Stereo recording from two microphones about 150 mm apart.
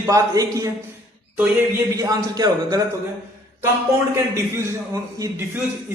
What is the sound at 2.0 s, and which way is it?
Speech, 25° right (ahead or behind).